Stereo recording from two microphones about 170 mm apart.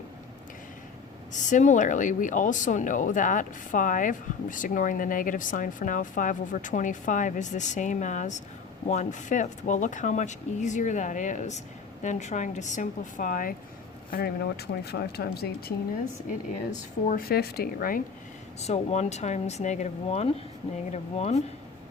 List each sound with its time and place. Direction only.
1.3 s speech: 45° left (ahead or behind)
14.1 s speech: 65° left (ahead or behind)
17.1 s speech: 60° left (ahead or behind)
18.6 s speech: 40° left (ahead or behind)